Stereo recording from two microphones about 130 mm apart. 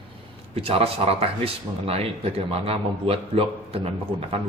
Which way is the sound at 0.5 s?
50° right (ahead or behind).